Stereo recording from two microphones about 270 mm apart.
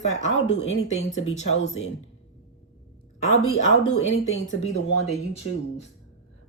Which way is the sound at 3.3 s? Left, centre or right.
Left.